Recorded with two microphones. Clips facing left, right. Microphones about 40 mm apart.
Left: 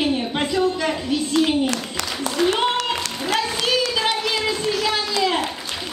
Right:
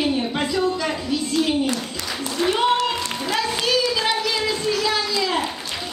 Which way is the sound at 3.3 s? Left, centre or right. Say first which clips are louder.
Even; left.